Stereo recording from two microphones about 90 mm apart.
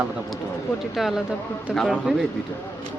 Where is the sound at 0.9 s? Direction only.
5° right (ahead or behind).